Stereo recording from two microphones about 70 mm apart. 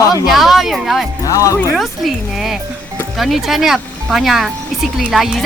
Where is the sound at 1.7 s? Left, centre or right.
Centre.